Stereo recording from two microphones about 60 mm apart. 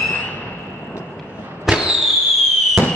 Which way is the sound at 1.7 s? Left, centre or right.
Centre.